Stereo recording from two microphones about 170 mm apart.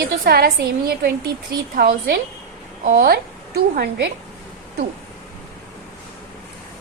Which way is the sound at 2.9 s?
65° right (ahead or behind).